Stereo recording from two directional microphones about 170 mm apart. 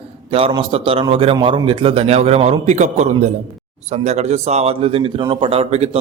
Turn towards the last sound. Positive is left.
turn(degrees=-35)  # may be behind; listen again after turning